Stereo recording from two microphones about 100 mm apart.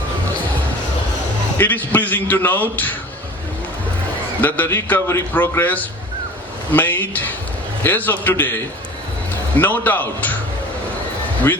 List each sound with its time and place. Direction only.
1.5 s a man's voice: 20° left (ahead or behind)
4.4 s a man's voice: 15° left (ahead or behind)
9.6 s a man's voice: 20° left (ahead or behind)